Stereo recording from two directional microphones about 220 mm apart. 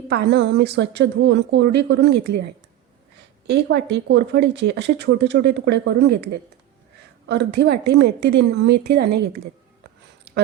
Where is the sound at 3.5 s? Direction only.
50° right (ahead or behind).